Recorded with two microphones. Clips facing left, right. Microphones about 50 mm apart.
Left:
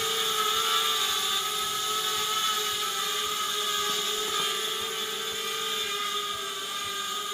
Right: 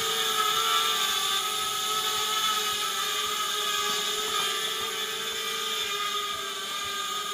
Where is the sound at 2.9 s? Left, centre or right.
Centre.